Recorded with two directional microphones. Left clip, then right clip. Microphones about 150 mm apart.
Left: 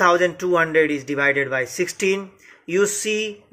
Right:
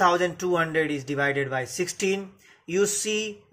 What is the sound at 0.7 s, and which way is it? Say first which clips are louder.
Speech: left 7 dB; 20° right (ahead or behind).